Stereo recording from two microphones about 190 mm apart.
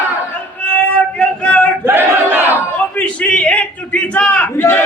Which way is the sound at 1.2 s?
5° left (ahead or behind).